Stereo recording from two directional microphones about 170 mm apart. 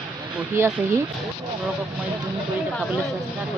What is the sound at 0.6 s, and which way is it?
Speech, 15° right (ahead or behind).